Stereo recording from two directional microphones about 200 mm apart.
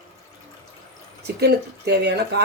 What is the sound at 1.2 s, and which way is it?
Speech, 55° right (ahead or behind).